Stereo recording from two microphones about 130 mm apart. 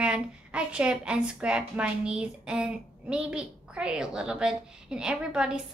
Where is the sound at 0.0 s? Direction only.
5° right (ahead or behind).